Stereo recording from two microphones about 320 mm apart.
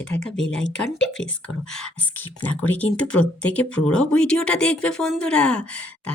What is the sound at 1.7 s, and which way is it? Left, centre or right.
Speech, centre.